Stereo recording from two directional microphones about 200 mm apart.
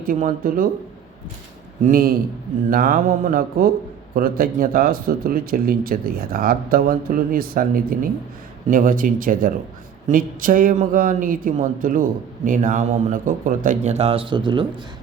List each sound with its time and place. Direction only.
0.0 s a man's voice: 45° right (ahead or behind)
1.8 s a man's voice: 45° right (ahead or behind); by 14.7 s 25° right (ahead or behind)